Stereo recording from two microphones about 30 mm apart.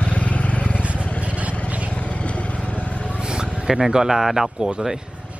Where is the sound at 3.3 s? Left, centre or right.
Right.